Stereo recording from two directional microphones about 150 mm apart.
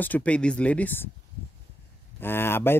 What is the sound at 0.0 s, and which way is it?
Speech, 10° left (ahead or behind).